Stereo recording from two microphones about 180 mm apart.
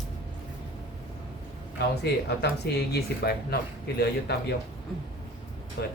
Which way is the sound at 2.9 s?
65° left (ahead or behind).